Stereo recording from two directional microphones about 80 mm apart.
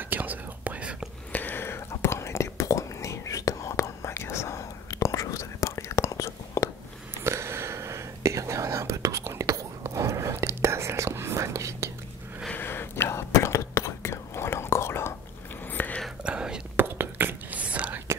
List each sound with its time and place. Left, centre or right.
0.1 s whispering: right
1.3 s whispering: left
7.2 s whispering: right
12.5 s whispering: left
15.7 s whispering: left
16.3 s whispering: centre
16.7 s whispering: right